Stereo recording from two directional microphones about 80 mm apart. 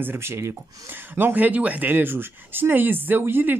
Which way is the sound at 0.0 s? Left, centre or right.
Right.